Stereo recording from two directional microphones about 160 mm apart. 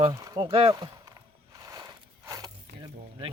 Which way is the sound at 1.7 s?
20° right (ahead or behind).